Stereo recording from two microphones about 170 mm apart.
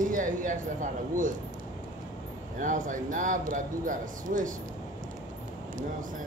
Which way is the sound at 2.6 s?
50° right (ahead or behind).